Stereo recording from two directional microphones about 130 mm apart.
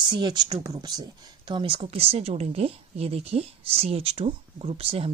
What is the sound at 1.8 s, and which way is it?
Speech, 50° right (ahead or behind).